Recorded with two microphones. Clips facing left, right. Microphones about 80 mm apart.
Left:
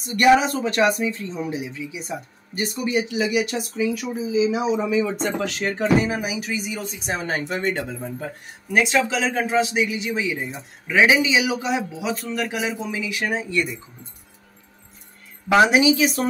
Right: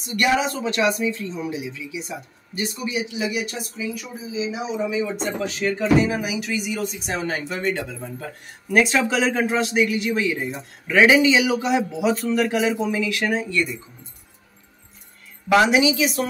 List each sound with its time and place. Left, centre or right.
0.0 s speech: left
6.0 s speech: left
7.3 s speech: left
8.7 s speech: centre
9.8 s speech: centre
15.7 s speech: left